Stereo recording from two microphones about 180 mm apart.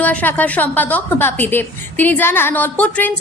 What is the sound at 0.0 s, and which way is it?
A woman's voice, 10° left (ahead or behind).